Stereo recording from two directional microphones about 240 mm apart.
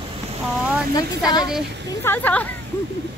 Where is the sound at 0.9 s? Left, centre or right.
Centre.